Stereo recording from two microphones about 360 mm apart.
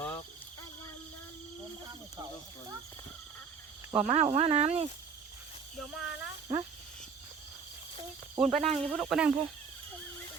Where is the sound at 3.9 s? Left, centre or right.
Centre.